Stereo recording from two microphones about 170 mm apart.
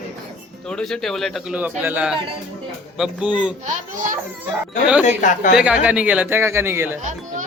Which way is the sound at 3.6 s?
50° right (ahead or behind).